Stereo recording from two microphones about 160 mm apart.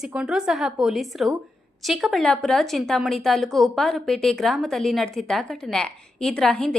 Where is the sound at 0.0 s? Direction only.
5° right (ahead or behind).